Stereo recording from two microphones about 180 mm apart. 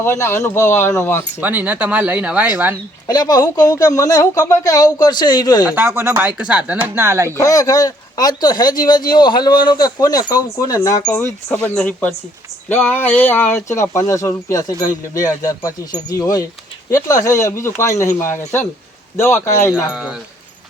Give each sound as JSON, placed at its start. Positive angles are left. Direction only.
{"t": 0.0, "sound": "speech", "side_deg": 15}
{"t": 1.4, "sound": "speech", "side_deg": -10}
{"t": 3.1, "sound": "speech", "side_deg": 20}
{"t": 5.6, "sound": "speech", "side_deg": -10}
{"t": 7.3, "sound": "speech", "side_deg": 20}
{"t": 19.7, "sound": "speech", "side_deg": -5}